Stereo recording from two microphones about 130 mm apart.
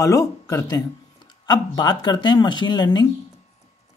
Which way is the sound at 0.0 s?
25° left (ahead or behind).